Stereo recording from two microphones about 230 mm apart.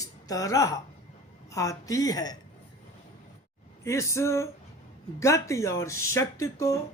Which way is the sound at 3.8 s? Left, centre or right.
Centre.